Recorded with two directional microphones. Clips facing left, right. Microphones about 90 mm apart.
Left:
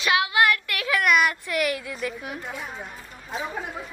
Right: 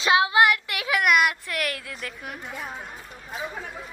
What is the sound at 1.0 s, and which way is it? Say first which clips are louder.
A child's voice: even; 5° right (ahead or behind).